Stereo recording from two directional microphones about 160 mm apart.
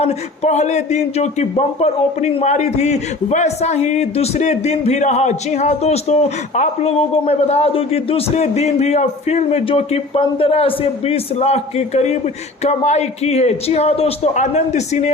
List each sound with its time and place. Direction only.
0.0 s a man's voice: 45° left (ahead or behind)